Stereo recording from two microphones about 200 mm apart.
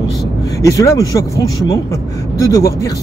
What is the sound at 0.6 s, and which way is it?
Speech, 15° left (ahead or behind).